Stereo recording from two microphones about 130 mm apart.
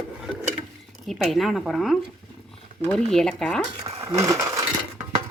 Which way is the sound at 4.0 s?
25° right (ahead or behind).